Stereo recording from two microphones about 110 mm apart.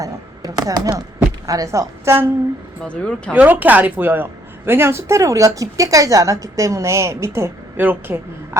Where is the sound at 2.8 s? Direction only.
10° left (ahead or behind).